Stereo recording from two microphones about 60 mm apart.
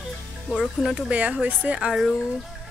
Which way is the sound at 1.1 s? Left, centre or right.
Right.